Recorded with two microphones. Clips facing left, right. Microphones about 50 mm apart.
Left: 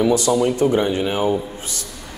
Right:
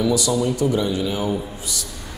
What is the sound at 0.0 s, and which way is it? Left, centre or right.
A man's voice, left.